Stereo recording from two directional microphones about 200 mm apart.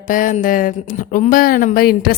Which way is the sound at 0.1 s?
40° left (ahead or behind).